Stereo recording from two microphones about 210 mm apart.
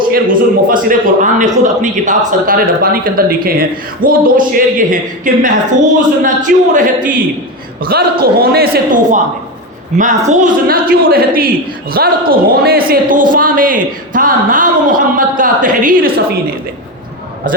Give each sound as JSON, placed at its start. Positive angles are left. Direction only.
{"t": 0.1, "sound": "a man's voice", "side_deg": -40}